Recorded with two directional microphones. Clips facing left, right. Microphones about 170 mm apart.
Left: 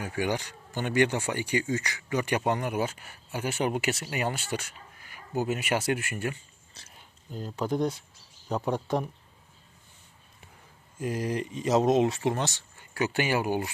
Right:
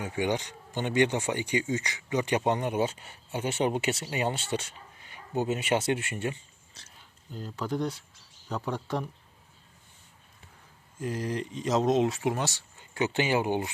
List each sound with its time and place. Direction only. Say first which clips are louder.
0.0 s speech: right 1 dB; 20° right (ahead or behind)
6.8 s speech: left 1 dB; centre (ahead or behind)
7.3 s speech: left 3 dB; 20° left (ahead or behind)
11.0 s speech: left 2 dB; 10° left (ahead or behind); by 13.7 s 20° right (ahead or behind)